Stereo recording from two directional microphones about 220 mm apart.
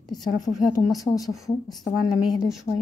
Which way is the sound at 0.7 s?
15° left (ahead or behind).